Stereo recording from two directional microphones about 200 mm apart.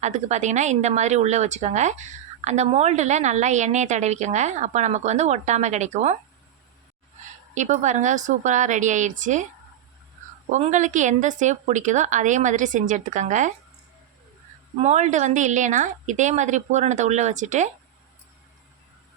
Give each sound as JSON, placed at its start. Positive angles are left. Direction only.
{"t": 0.0, "sound": "speech", "side_deg": -35}
{"t": 7.5, "sound": "speech", "side_deg": -40}
{"t": 10.5, "sound": "speech", "side_deg": -35}
{"t": 14.8, "sound": "speech", "side_deg": -35}